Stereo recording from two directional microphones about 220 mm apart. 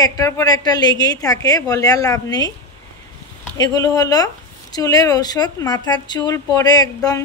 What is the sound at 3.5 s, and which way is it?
A woman's voice, 15° left (ahead or behind).